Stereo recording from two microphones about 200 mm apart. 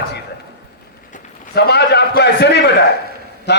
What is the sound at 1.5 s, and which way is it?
A man's voice, 55° left (ahead or behind).